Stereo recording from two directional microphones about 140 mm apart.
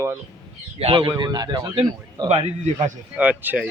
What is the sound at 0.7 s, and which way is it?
A man's voice, 40° right (ahead or behind).